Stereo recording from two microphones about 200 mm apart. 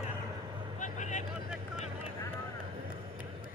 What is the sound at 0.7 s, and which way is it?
Vehicle, 35° left (ahead or behind).